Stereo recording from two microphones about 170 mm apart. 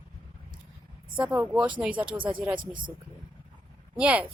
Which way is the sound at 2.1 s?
30° right (ahead or behind).